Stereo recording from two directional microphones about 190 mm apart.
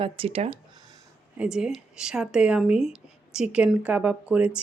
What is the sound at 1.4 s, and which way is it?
Speech, 5° right (ahead or behind).